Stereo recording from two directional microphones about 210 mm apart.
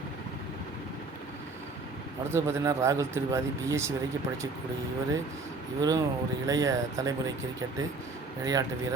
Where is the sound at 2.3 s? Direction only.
15° right (ahead or behind).